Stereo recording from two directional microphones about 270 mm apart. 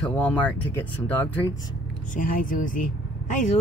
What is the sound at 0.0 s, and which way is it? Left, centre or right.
Speech, centre.